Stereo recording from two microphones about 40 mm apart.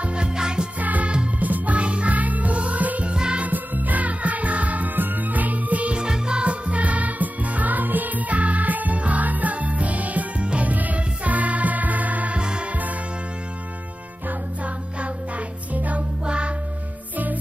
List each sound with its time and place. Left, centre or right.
0.0 s music: right
0.7 s music: right
3.1 s music: right
3.4 s music: right
5.9 s music: centre; by 10.2 s right
10.4 s music: right
10.7 s music: right
12.4 s music: right
15.0 s music: right
16.3 s music: right